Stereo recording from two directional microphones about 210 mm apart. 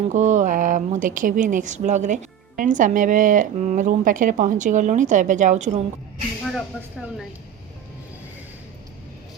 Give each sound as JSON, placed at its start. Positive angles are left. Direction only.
{"t": 0.1, "sound": "a woman's voice", "side_deg": -35}